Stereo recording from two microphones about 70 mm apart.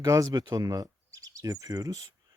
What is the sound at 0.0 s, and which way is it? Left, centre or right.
Speech, right.